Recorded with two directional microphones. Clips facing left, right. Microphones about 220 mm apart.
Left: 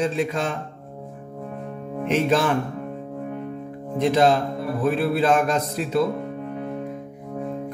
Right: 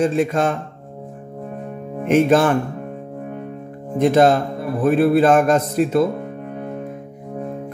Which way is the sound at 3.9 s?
50° right (ahead or behind).